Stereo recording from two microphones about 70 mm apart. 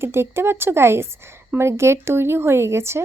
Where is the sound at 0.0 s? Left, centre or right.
Right.